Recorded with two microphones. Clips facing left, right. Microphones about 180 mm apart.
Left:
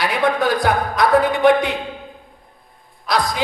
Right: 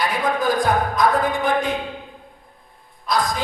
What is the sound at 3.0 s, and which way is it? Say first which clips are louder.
Speech: left 1 dB; 70° left (ahead or behind).